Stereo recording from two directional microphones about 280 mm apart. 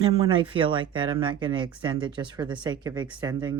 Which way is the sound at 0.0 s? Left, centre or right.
Centre.